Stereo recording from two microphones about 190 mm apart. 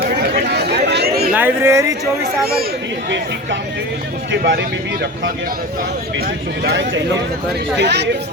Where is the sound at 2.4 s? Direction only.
55° right (ahead or behind).